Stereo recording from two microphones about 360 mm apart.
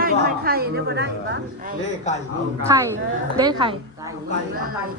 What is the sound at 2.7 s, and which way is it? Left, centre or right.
A woman's voice, centre.